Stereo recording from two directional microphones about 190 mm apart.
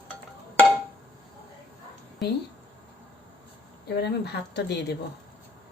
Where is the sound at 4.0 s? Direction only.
60° left (ahead or behind).